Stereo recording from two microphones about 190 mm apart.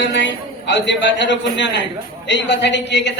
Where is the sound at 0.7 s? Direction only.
70° left (ahead or behind).